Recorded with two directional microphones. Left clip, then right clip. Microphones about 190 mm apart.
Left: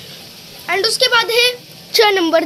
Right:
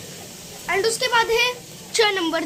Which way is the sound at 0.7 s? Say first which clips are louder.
Left 6 dB; 45° left (ahead or behind).